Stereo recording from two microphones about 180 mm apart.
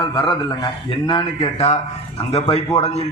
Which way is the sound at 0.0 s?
25° left (ahead or behind).